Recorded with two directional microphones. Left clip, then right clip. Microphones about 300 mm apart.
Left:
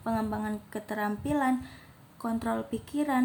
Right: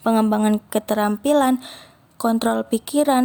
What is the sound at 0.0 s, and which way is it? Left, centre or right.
A woman's voice, right.